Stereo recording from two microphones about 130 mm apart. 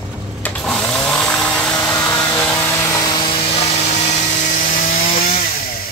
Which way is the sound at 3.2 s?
50° left (ahead or behind).